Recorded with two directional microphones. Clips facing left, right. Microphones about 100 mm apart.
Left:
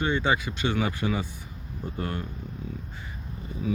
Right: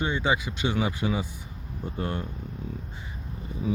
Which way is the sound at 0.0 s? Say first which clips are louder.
Left 1 dB; 15° right (ahead or behind).